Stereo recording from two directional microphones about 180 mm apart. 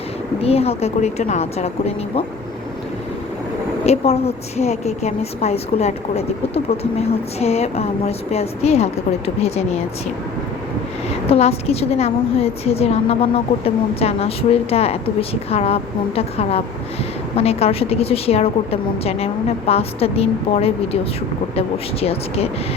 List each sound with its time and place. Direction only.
0.4 s a woman's voice: 35° left (ahead or behind)
3.8 s a woman's voice: 35° left (ahead or behind)
11.3 s a woman's voice: 35° left (ahead or behind)